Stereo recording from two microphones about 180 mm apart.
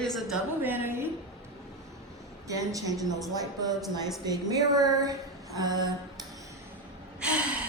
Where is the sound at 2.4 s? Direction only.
20° right (ahead or behind).